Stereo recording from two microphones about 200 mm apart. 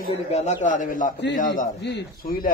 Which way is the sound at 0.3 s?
35° left (ahead or behind).